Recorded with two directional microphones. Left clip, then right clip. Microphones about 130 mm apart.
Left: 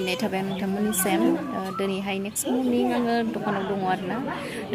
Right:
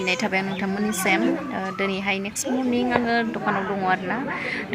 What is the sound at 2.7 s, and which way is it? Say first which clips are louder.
Speech: right 4 dB; 20° left (ahead or behind).